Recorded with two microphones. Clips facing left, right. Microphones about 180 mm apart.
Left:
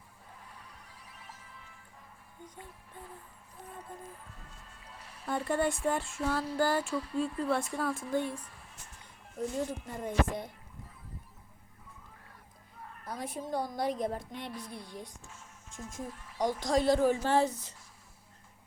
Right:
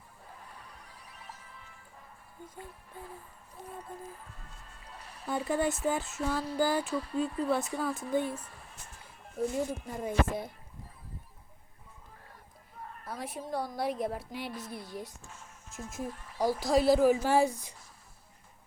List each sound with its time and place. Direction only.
5.2 s speech: centre (ahead or behind)
8.3 s speech: 45° right (ahead or behind)
9.6 s a woman's voice: 10° right (ahead or behind)
13.1 s a woman's voice: 5° right (ahead or behind)